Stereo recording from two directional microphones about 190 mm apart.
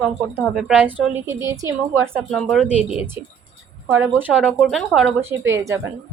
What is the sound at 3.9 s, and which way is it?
A woman's voice, 10° right (ahead or behind).